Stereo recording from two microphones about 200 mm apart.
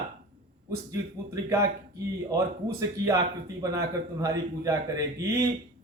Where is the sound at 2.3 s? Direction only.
15° right (ahead or behind).